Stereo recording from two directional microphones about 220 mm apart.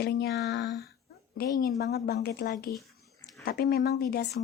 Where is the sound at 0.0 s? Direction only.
50° left (ahead or behind).